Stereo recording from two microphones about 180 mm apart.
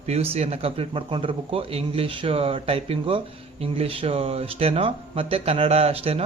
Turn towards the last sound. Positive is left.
turn(degrees=-35)  # may be behind; listen again after turning